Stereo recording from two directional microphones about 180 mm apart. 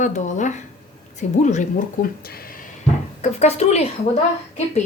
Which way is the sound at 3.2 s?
40° left (ahead or behind).